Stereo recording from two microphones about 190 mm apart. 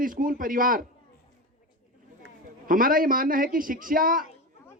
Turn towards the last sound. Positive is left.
turn(degrees=-45)  # may be behind; listen again after turning